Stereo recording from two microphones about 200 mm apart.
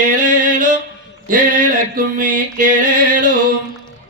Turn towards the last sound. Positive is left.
turn(degrees=-40)  # may be behind; listen again after turning